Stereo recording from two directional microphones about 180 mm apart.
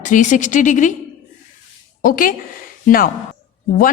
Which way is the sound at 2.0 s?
50° left (ahead or behind).